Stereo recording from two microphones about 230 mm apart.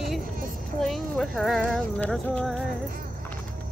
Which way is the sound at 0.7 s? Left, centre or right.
Centre.